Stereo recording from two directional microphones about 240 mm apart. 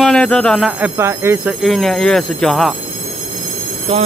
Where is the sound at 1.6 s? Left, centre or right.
Centre.